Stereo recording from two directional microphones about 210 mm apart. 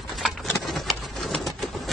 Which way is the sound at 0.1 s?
Centre (ahead or behind).